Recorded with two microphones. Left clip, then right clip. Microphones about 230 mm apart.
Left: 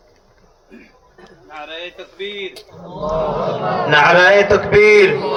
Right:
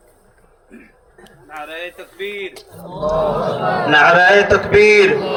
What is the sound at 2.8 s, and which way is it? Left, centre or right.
A man's voice, right.